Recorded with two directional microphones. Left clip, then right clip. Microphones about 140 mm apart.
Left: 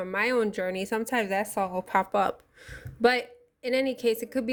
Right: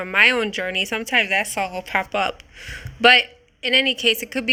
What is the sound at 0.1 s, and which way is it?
A woman's voice, 30° left (ahead or behind).